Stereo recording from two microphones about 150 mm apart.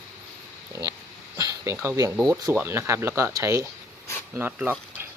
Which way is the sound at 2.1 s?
5° right (ahead or behind).